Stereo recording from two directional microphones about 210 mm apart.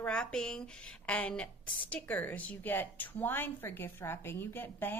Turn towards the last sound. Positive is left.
turn(degrees=10)  # may be behind; listen again after turning